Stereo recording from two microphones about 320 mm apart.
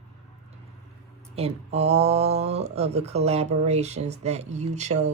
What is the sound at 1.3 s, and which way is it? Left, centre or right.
Speech, centre.